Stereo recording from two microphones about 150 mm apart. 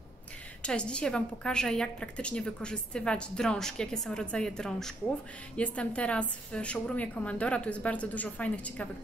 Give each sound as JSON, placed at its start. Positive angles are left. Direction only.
{"t": 0.6, "sound": "a woman's voice", "side_deg": 5}